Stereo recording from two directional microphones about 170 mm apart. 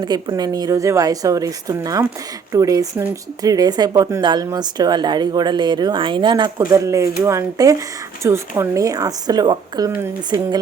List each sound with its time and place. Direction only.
0.0 s speech: 25° right (ahead or behind)